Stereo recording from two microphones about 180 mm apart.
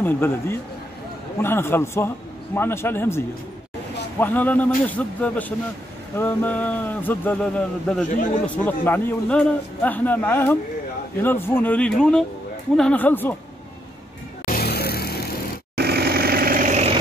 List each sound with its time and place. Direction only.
0.0 s a man's voice: 10° left (ahead or behind)
14.4 s a sound: 55° left (ahead or behind)
15.7 s vehicle: 65° right (ahead or behind); by 16.9 s 40° right (ahead or behind)